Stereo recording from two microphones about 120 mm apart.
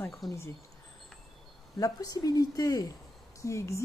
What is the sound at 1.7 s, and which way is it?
A woman's voice, 30° left (ahead or behind).